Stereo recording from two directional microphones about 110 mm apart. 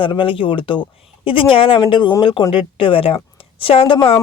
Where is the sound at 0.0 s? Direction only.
50° left (ahead or behind).